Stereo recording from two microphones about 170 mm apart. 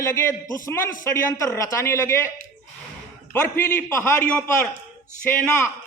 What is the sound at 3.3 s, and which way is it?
A man's voice, 15° left (ahead or behind).